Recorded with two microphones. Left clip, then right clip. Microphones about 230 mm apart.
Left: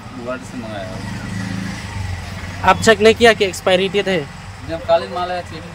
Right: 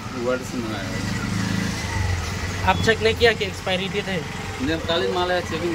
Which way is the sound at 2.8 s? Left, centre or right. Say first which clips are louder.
Left 8 dB; left.